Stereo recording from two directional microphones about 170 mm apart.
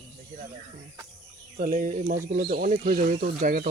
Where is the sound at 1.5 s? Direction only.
55° right (ahead or behind).